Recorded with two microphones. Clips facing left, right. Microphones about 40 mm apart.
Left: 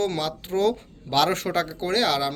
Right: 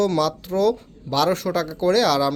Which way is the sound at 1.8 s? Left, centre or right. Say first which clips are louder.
Right 7 dB; left.